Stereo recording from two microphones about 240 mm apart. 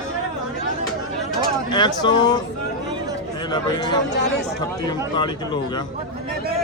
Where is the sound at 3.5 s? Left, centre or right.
Centre.